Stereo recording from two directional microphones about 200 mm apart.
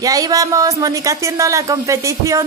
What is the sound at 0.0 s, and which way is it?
Speech, 20° right (ahead or behind).